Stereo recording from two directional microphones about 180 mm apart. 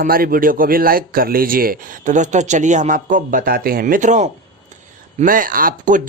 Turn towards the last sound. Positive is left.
turn(degrees=-50)  # may be behind; listen again after turning